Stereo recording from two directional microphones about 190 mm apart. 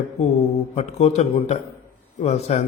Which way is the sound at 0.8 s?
35° left (ahead or behind).